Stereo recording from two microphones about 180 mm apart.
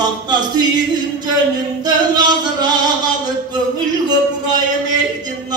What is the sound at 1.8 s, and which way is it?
Speech, 20° right (ahead or behind).